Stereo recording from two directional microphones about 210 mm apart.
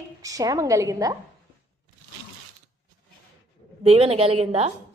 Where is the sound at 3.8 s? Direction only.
30° right (ahead or behind).